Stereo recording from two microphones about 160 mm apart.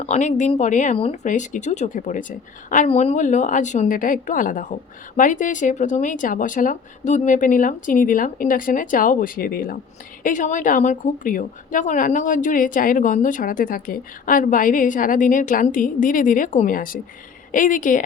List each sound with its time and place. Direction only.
0.0 s a woman's voice: 45° left (ahead or behind)
2.8 s a woman's voice: 40° left (ahead or behind); by 9.7 s 65° left (ahead or behind)
10.2 s a woman's voice: 55° left (ahead or behind)